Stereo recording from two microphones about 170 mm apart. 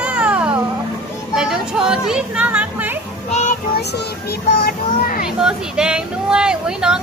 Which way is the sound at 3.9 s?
65° left (ahead or behind).